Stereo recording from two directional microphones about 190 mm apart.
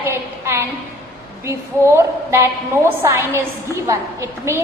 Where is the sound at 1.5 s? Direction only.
15° right (ahead or behind).